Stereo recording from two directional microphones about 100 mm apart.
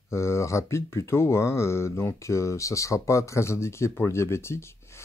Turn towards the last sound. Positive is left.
turn(degrees=25)  # may be behind; listen again after turning